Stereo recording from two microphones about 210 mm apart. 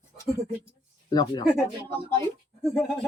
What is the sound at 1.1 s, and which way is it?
Speech, 20° left (ahead or behind).